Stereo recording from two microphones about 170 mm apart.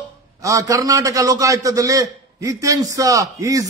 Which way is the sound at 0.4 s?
20° right (ahead or behind).